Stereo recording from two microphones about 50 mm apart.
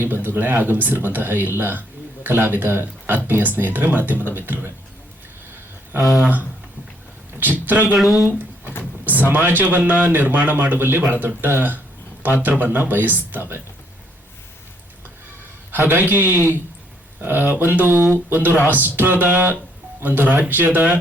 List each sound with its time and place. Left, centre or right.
0.0 s speech: right
7.3 s speech: right
7.9 s speech: centre
9.0 s speech: right
15.7 s speech: right